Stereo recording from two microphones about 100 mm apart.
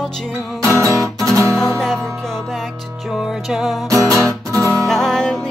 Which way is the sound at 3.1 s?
5° right (ahead or behind).